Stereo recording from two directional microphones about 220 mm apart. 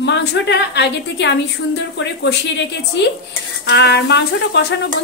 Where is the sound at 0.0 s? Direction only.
50° left (ahead or behind).